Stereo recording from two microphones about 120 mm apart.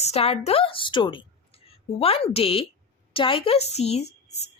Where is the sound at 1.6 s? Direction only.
55° left (ahead or behind).